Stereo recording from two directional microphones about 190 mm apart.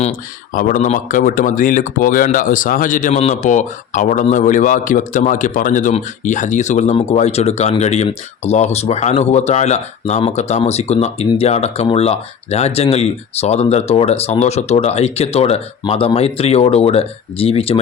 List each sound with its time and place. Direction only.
0.5 s speech: 45° left (ahead or behind); by 17.7 s 30° left (ahead or behind)